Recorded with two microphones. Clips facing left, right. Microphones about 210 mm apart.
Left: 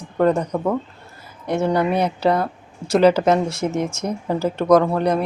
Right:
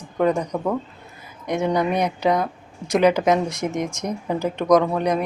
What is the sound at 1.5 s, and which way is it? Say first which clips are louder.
Speech: left 2 dB; 15° right (ahead or behind).